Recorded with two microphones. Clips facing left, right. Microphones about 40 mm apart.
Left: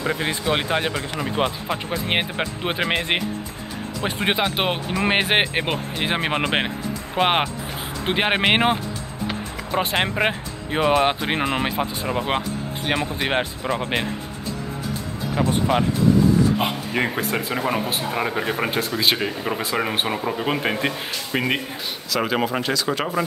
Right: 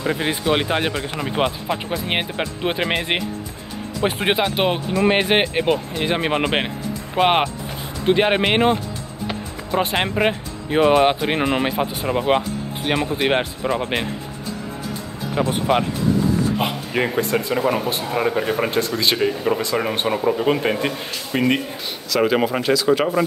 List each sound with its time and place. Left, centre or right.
0.0 s speech: centre
1.7 s speech: centre
4.5 s speech: centre
8.0 s speech: centre
9.3 s speech: centre
15.3 s speech: centre